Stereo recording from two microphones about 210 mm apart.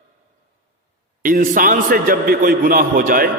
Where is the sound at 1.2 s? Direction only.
40° right (ahead or behind).